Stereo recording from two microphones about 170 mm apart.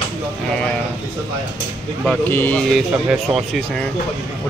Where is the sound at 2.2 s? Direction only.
10° left (ahead or behind).